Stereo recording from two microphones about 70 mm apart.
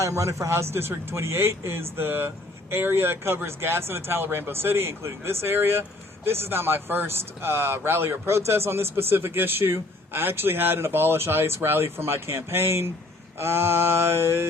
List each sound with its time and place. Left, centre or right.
0.0 s speech: right